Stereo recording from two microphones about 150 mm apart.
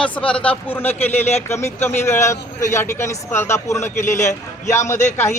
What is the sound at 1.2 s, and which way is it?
Speech, 45° left (ahead or behind).